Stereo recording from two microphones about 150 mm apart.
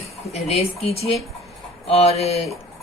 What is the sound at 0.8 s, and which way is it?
Speech, 45° left (ahead or behind).